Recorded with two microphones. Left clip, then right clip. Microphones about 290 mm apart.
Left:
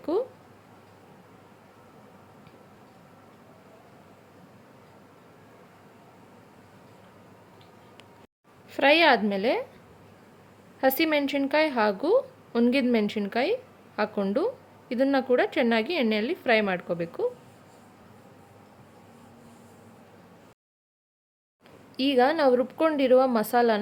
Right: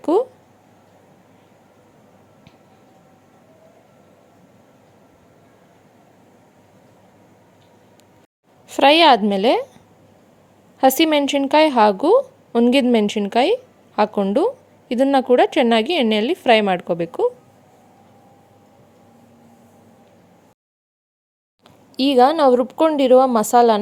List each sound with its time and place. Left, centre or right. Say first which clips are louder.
0.0 s a sound: right 10 dB; right
8.7 s a woman's voice: right 8 dB; right
10.8 s a woman's voice: right 9 dB; right
21.9 s a woman's voice: right 8 dB; centre